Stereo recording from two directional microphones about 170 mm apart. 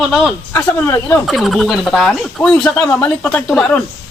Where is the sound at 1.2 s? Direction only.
Centre (ahead or behind).